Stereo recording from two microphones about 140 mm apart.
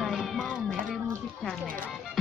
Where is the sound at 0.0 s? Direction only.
Centre (ahead or behind).